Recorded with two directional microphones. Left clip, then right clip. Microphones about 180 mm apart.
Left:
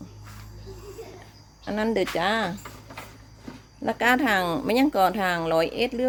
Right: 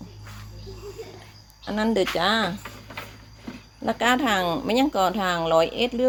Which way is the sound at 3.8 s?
20° left (ahead or behind).